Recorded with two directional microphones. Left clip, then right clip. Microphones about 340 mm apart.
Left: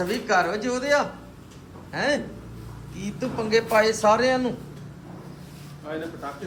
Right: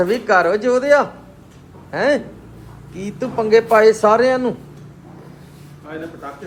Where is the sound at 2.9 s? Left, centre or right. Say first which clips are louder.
Right 7 dB; centre.